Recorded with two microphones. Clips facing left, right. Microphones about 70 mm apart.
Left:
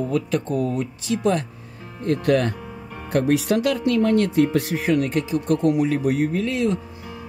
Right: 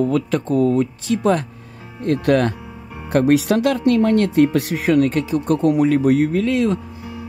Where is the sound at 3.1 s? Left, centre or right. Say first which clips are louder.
Right 4 dB; right.